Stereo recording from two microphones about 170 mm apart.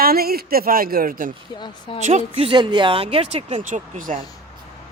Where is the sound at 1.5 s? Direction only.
30° left (ahead or behind).